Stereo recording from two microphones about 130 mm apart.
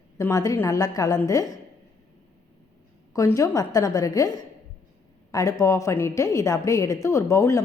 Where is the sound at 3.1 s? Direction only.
25° left (ahead or behind).